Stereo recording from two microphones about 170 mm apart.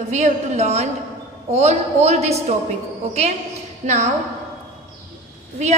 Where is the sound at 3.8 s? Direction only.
45° right (ahead or behind).